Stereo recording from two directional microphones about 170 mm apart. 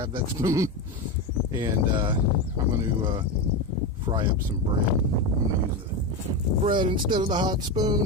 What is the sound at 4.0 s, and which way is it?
Speech, 25° right (ahead or behind).